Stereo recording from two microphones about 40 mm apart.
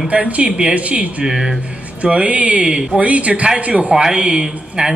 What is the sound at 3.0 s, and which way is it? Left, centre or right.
Speech, right.